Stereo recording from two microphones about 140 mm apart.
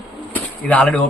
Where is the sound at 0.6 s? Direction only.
5° left (ahead or behind).